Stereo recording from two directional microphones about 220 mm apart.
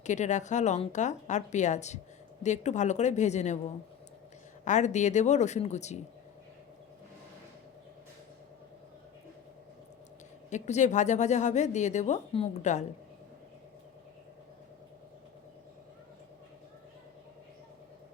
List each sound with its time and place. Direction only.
0.0 s a woman's voice: 30° left (ahead or behind)
4.6 s a woman's voice: 35° left (ahead or behind)
10.5 s a woman's voice: 35° left (ahead or behind)